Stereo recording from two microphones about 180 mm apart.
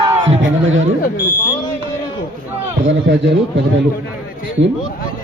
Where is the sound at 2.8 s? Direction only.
85° right.